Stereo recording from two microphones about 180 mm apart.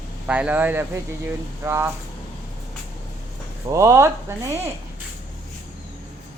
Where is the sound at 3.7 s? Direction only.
15° right (ahead or behind).